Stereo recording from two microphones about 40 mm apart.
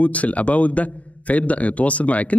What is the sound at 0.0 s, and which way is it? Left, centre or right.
Speech, left.